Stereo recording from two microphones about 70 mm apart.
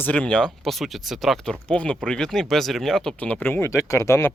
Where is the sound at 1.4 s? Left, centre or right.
Centre.